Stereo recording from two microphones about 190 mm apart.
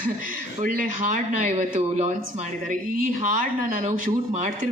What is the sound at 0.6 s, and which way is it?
A man's voice, 45° right (ahead or behind).